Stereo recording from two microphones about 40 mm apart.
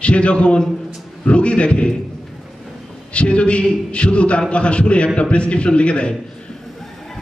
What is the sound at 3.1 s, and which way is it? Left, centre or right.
A man's voice, left.